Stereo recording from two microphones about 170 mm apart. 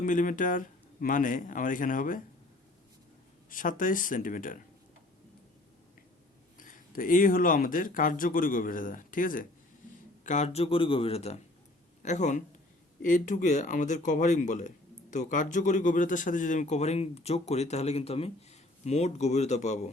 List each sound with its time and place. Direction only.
0.0 s a man's voice: 50° left (ahead or behind)
3.5 s a man's voice: 50° left (ahead or behind)
6.6 s a man's voice: 55° left (ahead or behind)